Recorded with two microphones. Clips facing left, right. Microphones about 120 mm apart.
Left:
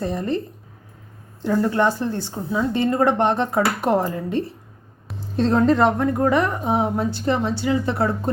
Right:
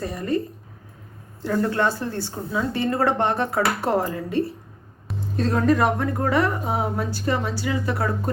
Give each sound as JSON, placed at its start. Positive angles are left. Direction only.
{"t": 0.0, "sound": "a woman's voice", "side_deg": 25}